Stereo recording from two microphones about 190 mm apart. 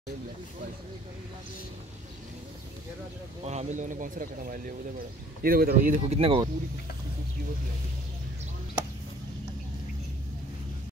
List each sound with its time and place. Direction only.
3.4 s speech: 40° right (ahead or behind)
6.1 s speech: 30° right (ahead or behind)